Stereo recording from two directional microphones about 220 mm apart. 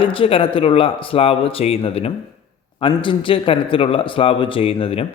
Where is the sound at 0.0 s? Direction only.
25° left (ahead or behind).